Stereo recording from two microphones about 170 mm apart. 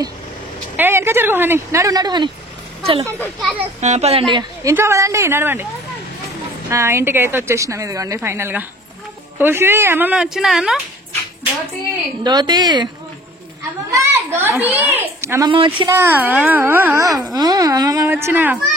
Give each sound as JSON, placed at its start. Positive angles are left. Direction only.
{"t": 0.7, "sound": "speech", "side_deg": -15}
{"t": 3.3, "sound": "a child's voice", "side_deg": 0}
{"t": 3.8, "sound": "a child's voice", "side_deg": -40}
{"t": 4.3, "sound": "a woman's voice", "side_deg": -25}
{"t": 6.7, "sound": "speech", "side_deg": -15}
{"t": 12.2, "sound": "a woman's voice", "side_deg": -25}
{"t": 13.9, "sound": "speech", "side_deg": -15}
{"t": 15.5, "sound": "a child's voice", "side_deg": -30}
{"t": 15.9, "sound": "speech", "side_deg": -15}